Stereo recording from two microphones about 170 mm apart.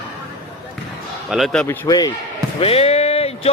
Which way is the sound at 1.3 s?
Centre (ahead or behind).